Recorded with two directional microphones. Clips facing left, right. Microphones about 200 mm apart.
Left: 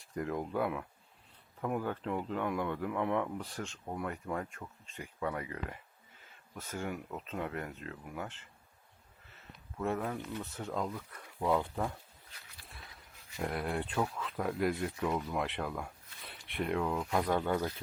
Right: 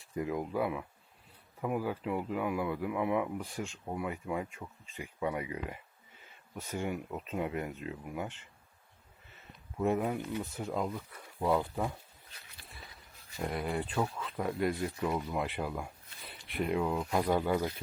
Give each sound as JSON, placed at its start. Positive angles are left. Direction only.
{"t": 0.1, "sound": "speech", "side_deg": -5}
{"t": 9.7, "sound": "speech", "side_deg": -15}
{"t": 12.6, "sound": "a sound", "side_deg": 0}
{"t": 13.4, "sound": "speech", "side_deg": 0}